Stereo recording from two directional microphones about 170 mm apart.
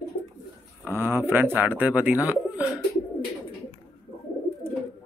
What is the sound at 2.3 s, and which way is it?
Bird, 10° right (ahead or behind).